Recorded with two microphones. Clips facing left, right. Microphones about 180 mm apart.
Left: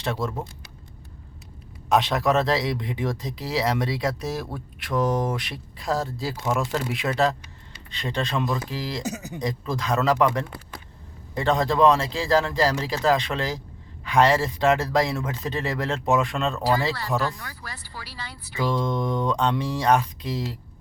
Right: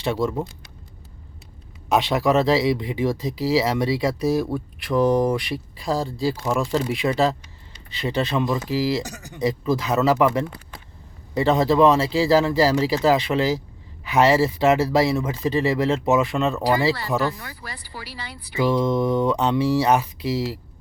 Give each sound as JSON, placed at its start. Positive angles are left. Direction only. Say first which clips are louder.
{"t": 0.0, "sound": "speech", "louder": "right 5 dB", "side_deg": 0}
{"t": 1.9, "sound": "speech", "louder": "right 2 dB", "side_deg": 0}
{"t": 18.0, "sound": "speech", "louder": "right 3 dB", "side_deg": -65}
{"t": 18.5, "sound": "speech", "louder": "right 5 dB", "side_deg": -5}